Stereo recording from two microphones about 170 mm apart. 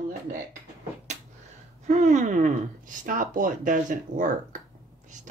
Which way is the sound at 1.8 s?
45° right (ahead or behind).